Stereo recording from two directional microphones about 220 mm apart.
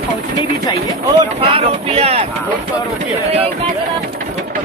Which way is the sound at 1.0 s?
25° right (ahead or behind).